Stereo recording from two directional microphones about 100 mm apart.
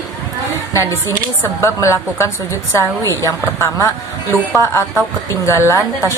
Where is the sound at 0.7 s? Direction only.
30° left (ahead or behind).